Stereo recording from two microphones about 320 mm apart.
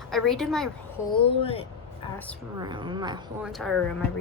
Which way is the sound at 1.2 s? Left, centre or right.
Centre.